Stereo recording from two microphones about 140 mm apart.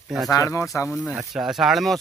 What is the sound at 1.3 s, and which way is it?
Speech, centre (ahead or behind).